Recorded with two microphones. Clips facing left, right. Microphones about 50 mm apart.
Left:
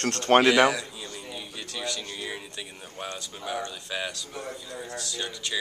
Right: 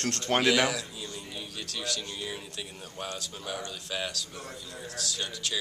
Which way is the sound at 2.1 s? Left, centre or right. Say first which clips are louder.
Left 2 dB; centre.